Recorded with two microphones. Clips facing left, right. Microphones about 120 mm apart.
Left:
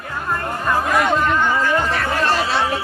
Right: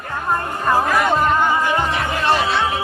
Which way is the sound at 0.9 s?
Centre (ahead or behind).